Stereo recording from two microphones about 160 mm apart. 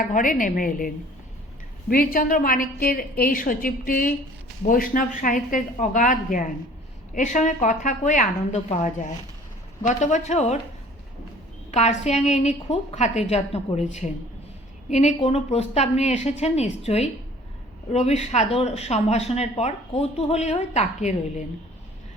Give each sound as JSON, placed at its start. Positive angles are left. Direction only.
{"t": 0.0, "sound": "a woman's voice", "side_deg": 55}
{"t": 11.7, "sound": "a woman's voice", "side_deg": 45}